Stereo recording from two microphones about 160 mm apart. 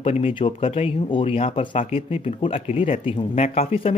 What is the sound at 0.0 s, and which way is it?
Speech, 40° left (ahead or behind).